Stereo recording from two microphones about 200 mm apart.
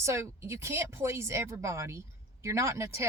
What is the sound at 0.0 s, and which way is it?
Speech, 15° right (ahead or behind).